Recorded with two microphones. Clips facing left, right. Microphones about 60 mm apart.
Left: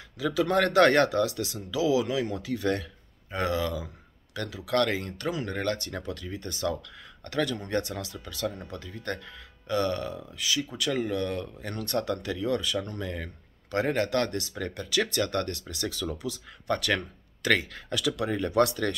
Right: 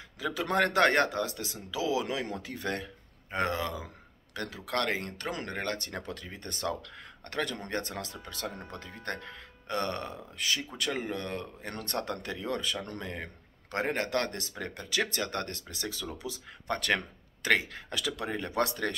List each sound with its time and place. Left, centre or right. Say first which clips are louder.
0.2 s speech: left 4 dB; right
4.7 s speech: left 5 dB; right
5.5 s speech: left 4 dB; right
10.9 s speech: left 6 dB; right